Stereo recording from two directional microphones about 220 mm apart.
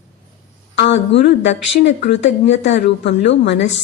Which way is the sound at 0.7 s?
55° left (ahead or behind).